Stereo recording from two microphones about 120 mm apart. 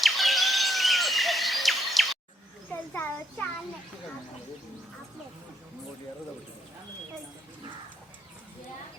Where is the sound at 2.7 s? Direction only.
15° left (ahead or behind).